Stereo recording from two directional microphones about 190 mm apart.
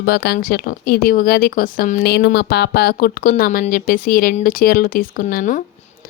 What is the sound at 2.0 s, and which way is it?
Speech, 60° left (ahead or behind).